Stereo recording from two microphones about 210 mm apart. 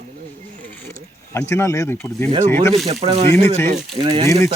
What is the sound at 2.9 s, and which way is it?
Speech, 30° right (ahead or behind).